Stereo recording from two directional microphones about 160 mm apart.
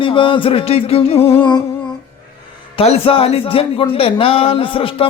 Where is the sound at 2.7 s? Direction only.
40° left (ahead or behind).